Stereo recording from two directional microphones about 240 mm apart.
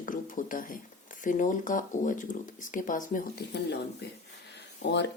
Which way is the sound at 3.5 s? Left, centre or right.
Left.